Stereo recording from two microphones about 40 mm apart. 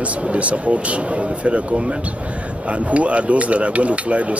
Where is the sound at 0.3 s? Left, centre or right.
Right.